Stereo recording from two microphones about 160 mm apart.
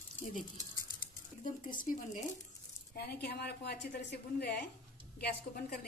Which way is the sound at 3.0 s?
90° left.